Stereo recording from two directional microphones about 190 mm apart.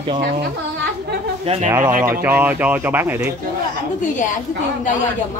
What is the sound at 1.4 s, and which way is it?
Speech, 30° right (ahead or behind).